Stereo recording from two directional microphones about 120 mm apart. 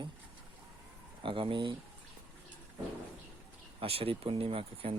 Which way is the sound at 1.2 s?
45° right (ahead or behind).